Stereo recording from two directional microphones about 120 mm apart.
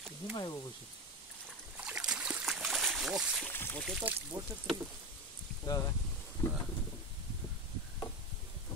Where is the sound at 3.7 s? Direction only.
Centre (ahead or behind).